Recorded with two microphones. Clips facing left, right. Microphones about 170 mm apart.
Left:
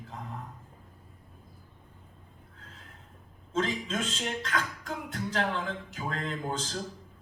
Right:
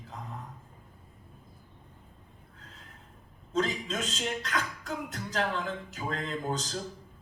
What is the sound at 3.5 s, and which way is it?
Speech, 40° right (ahead or behind).